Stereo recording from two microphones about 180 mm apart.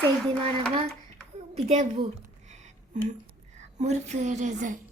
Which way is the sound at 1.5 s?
40° right (ahead or behind).